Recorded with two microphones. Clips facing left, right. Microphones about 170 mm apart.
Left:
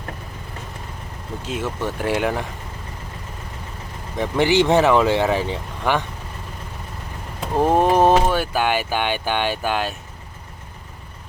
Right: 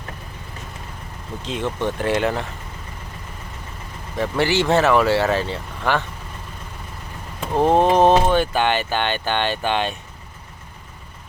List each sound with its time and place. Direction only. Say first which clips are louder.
1.4 s speech: right 2 dB; 5° left (ahead or behind)
4.2 s speech: left 2 dB; 15° left (ahead or behind)
7.5 s speech: right 1 dB; 10° left (ahead or behind)